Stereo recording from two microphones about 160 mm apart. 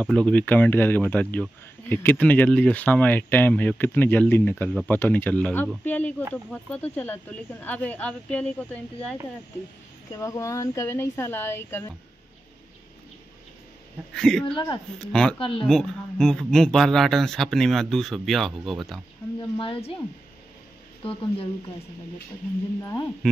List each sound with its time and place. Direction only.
0.0 s speech: 5° left (ahead or behind)
10.1 s speech: 20° left (ahead or behind)
14.1 s speech: 5° left (ahead or behind)
14.4 s speech: 30° left (ahead or behind)
15.6 s speech: 5° left (ahead or behind)
19.5 s speech: 35° left (ahead or behind)
21.0 s speech: 35° left (ahead or behind)
22.8 s speech: 20° left (ahead or behind)